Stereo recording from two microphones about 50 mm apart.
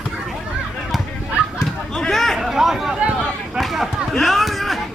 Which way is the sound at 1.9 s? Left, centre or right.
Centre.